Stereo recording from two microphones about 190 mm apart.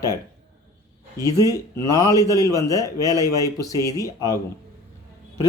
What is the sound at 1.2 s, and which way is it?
Speech, 20° left (ahead or behind).